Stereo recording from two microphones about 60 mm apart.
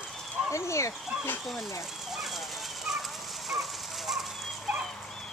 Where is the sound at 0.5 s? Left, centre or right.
Left.